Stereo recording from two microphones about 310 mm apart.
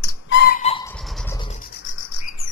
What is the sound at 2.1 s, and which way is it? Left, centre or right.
Bird, left.